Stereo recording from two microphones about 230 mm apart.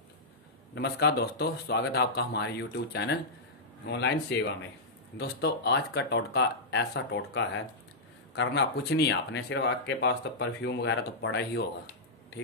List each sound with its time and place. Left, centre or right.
0.7 s speech: left